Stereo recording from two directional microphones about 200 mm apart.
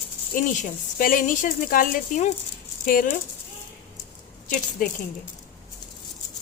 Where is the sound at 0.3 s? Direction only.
45° left (ahead or behind).